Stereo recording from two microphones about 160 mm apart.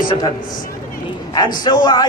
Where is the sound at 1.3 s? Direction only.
25° left (ahead or behind).